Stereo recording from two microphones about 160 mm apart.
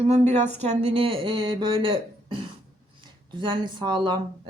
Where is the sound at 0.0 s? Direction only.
40° right (ahead or behind).